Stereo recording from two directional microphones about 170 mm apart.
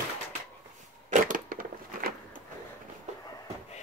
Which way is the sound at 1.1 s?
55° right (ahead or behind).